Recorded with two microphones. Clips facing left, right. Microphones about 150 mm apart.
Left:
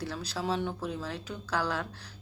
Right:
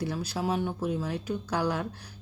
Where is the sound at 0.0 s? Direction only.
10° right (ahead or behind).